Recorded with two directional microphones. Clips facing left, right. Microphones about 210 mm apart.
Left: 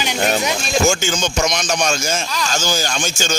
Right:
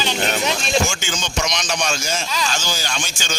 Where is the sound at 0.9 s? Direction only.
45° left (ahead or behind).